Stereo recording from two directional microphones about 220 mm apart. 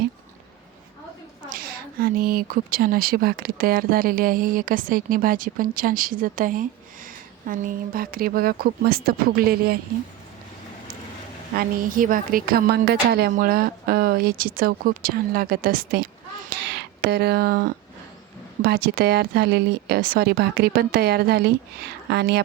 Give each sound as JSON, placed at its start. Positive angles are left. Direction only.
{"t": 1.5, "sound": "speech", "side_deg": -40}
{"t": 11.5, "sound": "speech", "side_deg": -40}